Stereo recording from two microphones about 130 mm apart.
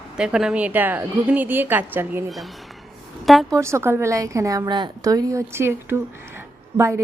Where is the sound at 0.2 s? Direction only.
5° right (ahead or behind).